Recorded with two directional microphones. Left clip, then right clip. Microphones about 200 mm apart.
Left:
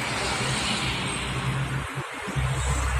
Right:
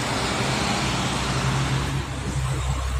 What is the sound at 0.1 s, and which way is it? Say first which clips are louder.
Vehicle: right 2 dB; 55° right (ahead or behind).